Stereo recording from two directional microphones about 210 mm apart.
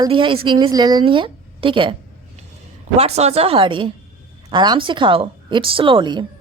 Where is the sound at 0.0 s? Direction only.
25° right (ahead or behind).